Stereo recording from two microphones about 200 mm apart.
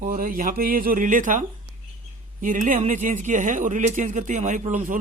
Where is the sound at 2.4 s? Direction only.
40° right (ahead or behind).